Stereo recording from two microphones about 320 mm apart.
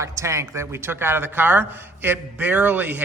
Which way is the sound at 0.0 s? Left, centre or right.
Centre.